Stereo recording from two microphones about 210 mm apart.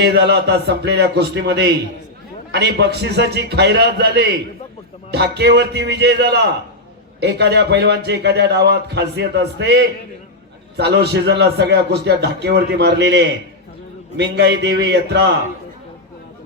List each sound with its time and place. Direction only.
0.0 s a man's voice: 50° right (ahead or behind)
10.8 s a man's voice: 50° right (ahead or behind)